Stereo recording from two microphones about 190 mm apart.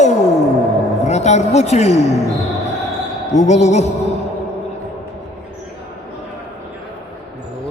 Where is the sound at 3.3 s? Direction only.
35° left (ahead or behind).